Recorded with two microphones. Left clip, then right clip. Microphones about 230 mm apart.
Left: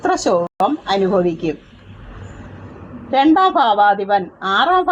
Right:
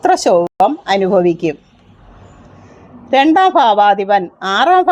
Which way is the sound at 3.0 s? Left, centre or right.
Right.